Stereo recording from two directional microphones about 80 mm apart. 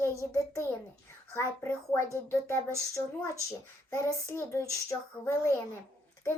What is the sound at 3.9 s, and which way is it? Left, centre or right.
A child's voice, left.